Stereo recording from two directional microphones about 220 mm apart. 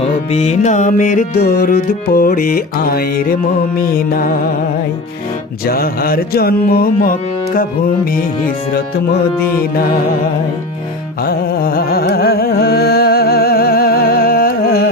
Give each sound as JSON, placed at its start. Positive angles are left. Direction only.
{"t": 0.0, "sound": "music", "side_deg": 30}
{"t": 5.6, "sound": "music", "side_deg": 40}
{"t": 11.3, "sound": "carnatic music", "side_deg": 40}